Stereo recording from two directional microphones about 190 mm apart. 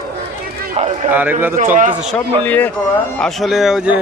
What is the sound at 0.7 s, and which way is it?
Speech, 35° right (ahead or behind).